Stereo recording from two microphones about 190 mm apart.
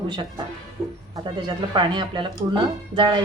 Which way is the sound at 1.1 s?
25° right (ahead or behind).